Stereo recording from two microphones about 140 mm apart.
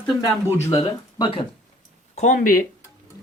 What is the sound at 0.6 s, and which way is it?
Speech, 25° left (ahead or behind).